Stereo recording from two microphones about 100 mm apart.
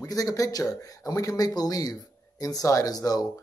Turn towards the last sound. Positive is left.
turn(degrees=40)  # may be behind; listen again after turning